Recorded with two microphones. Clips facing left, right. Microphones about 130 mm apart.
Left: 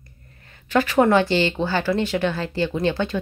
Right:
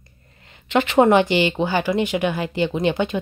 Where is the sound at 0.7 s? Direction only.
20° right (ahead or behind).